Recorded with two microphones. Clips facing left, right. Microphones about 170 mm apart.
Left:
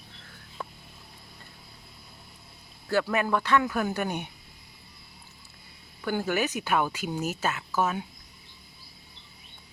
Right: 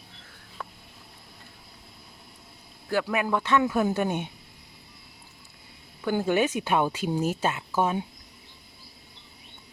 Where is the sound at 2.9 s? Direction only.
15° right (ahead or behind).